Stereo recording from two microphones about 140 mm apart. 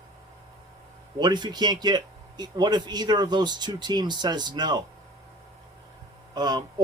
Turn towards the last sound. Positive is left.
turn(degrees=-30)  # may be behind; listen again after turning